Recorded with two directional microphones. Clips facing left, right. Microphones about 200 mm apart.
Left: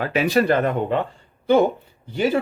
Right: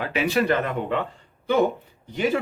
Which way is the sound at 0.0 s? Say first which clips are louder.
Left 4 dB; 40° left (ahead or behind).